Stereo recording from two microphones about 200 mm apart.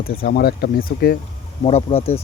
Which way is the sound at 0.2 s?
50° left (ahead or behind).